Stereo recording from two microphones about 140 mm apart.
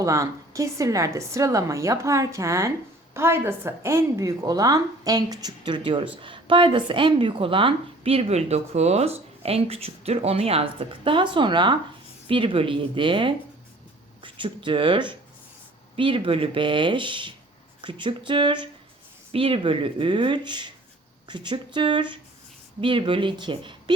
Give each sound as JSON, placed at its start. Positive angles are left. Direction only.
{"t": 0.0, "sound": "a woman's voice", "side_deg": -25}